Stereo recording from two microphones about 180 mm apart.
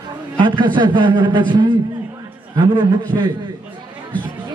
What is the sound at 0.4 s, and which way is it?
A man's voice, 25° right (ahead or behind).